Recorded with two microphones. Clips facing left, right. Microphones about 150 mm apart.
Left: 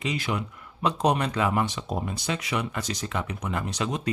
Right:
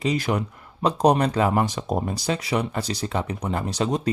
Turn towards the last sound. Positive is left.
turn(degrees=-35)  # may be behind; listen again after turning